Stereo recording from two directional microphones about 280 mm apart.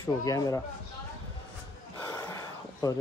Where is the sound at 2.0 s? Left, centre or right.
Centre.